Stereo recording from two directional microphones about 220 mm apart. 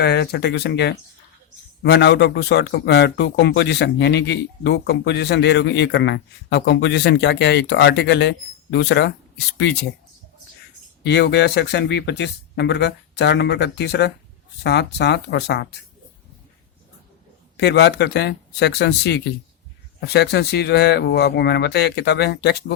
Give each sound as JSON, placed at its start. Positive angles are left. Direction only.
{"t": 0.0, "sound": "speech", "side_deg": 50}
{"t": 11.0, "sound": "speech", "side_deg": 50}
{"t": 17.6, "sound": "speech", "side_deg": 50}